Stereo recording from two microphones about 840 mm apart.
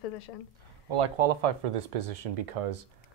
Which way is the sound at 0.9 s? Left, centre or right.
Right.